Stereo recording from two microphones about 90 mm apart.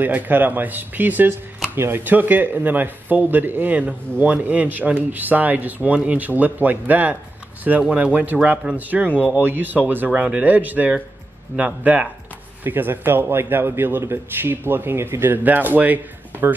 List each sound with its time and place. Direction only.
0.0 s a man's voice: 20° right (ahead or behind)